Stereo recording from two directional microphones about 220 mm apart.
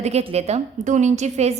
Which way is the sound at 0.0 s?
30° right (ahead or behind).